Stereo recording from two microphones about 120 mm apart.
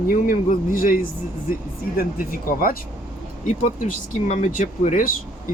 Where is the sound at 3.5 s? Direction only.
85° left.